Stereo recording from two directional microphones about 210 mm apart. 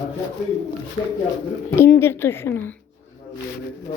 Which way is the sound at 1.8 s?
10° left (ahead or behind).